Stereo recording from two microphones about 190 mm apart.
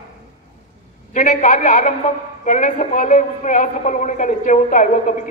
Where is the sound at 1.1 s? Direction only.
40° left (ahead or behind).